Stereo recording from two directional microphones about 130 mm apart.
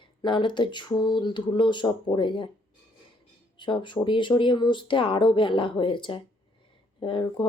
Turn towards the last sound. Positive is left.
turn(degrees=40)  # may be behind; listen again after turning